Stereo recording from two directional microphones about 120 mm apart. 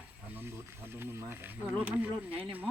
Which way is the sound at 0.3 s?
20° right (ahead or behind).